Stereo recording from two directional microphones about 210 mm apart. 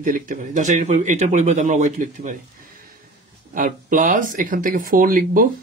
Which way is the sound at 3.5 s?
40° right (ahead or behind).